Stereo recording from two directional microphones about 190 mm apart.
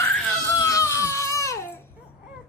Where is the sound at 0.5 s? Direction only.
15° left (ahead or behind).